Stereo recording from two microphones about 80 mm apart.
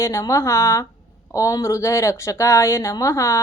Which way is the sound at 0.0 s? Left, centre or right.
Left.